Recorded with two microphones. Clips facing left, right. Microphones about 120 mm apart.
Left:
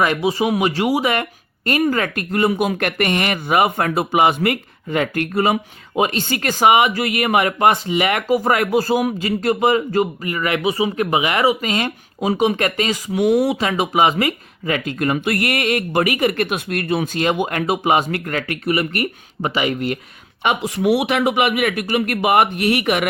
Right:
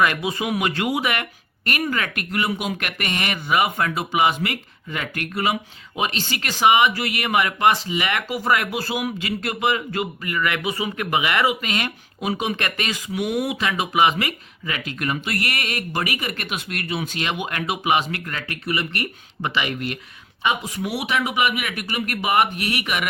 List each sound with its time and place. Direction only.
0.0 s speech: 25° left (ahead or behind)
14.2 s speech: 40° left (ahead or behind)
15.1 s speech: 55° left (ahead or behind)
19.4 s speech: 35° left (ahead or behind)
20.4 s speech: 60° left (ahead or behind)